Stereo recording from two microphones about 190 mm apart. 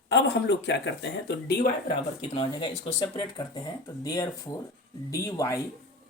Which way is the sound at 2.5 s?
20° left (ahead or behind).